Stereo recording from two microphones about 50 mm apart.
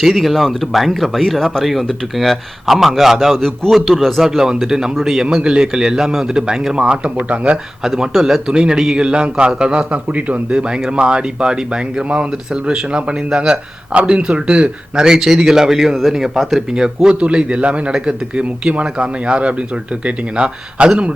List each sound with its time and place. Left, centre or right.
0.0 s speech: centre
4.2 s a man's voice: centre
5.2 s a man's voice: centre
7.8 s a man's voice: centre; by 10.4 s right
10.5 s a man's voice: centre
12.0 s a man's voice: right
17.2 s speech: right